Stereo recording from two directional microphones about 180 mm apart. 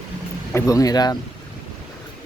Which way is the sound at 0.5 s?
20° left (ahead or behind).